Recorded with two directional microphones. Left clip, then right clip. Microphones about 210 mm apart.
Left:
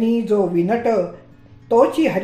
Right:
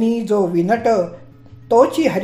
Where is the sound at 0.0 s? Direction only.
30° right (ahead or behind).